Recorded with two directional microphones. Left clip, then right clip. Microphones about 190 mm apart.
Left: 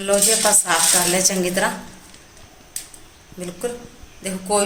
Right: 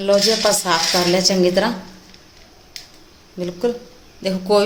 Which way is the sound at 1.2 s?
40° right (ahead or behind).